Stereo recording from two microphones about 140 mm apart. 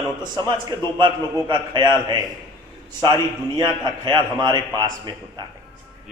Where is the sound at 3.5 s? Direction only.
35° right (ahead or behind).